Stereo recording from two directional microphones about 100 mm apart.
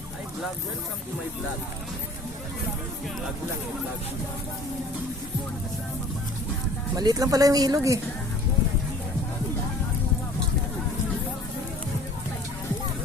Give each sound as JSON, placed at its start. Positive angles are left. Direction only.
{"t": 6.9, "sound": "speech", "side_deg": -40}